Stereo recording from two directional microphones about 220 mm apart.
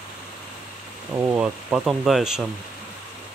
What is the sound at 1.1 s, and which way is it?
Speech, 10° right (ahead or behind).